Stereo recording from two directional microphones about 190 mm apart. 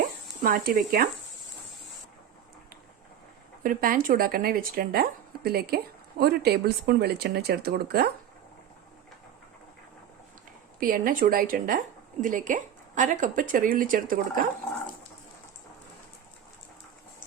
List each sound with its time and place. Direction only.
0.4 s speech: 50° right (ahead or behind)
3.6 s speech: 45° right (ahead or behind)
10.8 s speech: 45° right (ahead or behind)